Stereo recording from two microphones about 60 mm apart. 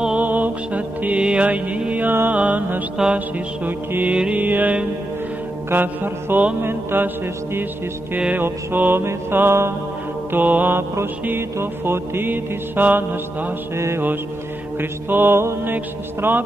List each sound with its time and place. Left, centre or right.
0.2 s mantra: right
3.0 s music: centre
3.6 s mantra: right
8.4 s mantra: right
10.3 s mantra: right
13.7 s mantra: right
14.8 s mantra: right